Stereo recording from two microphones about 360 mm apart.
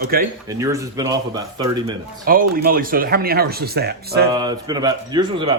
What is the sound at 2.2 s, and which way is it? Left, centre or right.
Speech, right.